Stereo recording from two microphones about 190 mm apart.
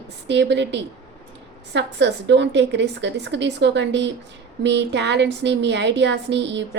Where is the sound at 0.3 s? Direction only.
65° right (ahead or behind).